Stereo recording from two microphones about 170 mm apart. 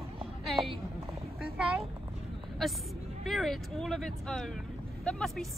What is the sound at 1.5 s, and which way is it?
Speech, 5° right (ahead or behind).